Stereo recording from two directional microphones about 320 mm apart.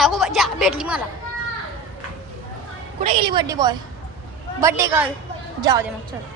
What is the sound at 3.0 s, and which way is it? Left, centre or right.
A woman's voice, centre.